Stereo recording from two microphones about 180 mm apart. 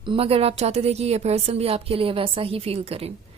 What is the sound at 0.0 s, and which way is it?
Speech, 30° right (ahead or behind).